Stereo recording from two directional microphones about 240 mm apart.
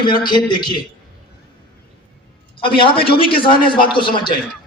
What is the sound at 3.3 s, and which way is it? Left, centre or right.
Speech, left.